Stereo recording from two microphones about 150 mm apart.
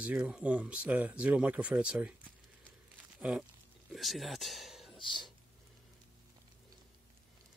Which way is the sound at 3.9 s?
Centre (ahead or behind).